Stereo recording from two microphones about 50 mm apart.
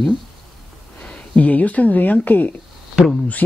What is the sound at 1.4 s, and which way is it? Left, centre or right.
Speech, left.